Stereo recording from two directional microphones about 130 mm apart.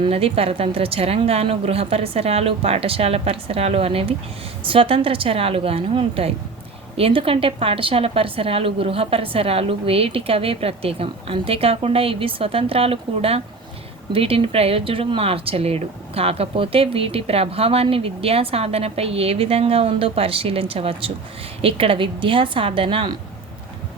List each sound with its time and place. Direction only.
0.0 s speech: 50° right (ahead or behind)